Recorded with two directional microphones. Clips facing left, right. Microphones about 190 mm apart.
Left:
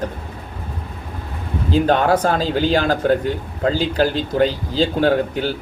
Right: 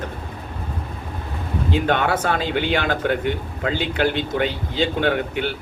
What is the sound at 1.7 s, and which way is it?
Speech, 35° left (ahead or behind).